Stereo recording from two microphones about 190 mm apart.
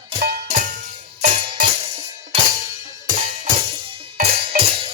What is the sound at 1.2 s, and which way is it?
Music, 40° right (ahead or behind).